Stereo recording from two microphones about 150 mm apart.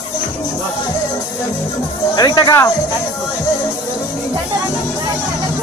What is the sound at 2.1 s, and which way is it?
Speech, 25° left (ahead or behind).